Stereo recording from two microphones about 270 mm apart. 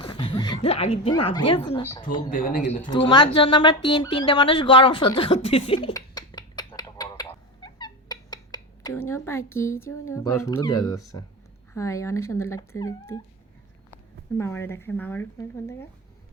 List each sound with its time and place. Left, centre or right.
0.0 s speech: centre
2.3 s a man's voice: left
2.8 s speech: centre
3.8 s a sound: centre
9.0 s speech: centre
14.3 s speech: centre